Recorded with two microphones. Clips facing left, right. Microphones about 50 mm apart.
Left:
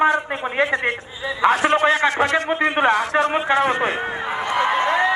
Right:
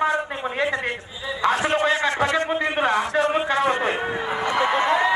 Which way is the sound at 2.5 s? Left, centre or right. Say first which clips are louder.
Left 4 dB; left.